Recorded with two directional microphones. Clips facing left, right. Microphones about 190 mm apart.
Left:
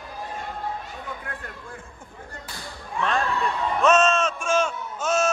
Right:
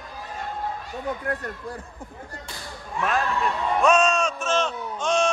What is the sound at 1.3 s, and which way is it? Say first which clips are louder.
Speech: right 8 dB; 40° right (ahead or behind).